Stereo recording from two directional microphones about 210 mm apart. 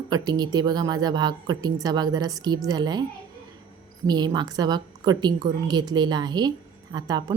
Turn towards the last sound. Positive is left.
turn(degrees=-20)  # may be behind; listen again after turning